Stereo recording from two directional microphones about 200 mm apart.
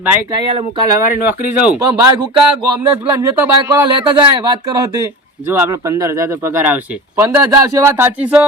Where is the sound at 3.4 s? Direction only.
15° right (ahead or behind).